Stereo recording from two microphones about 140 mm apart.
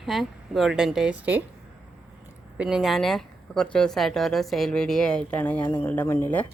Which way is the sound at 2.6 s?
5° right (ahead or behind).